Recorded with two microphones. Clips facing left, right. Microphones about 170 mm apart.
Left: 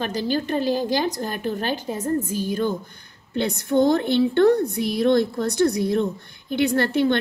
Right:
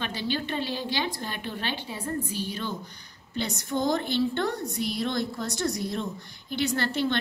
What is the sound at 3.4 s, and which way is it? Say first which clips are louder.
A woman's voice: left 9 dB; 60° left (ahead or behind).